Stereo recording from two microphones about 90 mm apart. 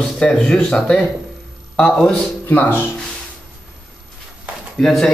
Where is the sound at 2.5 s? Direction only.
20° left (ahead or behind).